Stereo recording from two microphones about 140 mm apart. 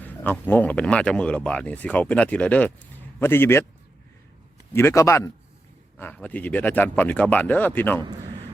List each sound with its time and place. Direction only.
0.0 s speech: 15° left (ahead or behind)
4.7 s a man's voice: 20° left (ahead or behind)
8.0 s a sound: 35° right (ahead or behind)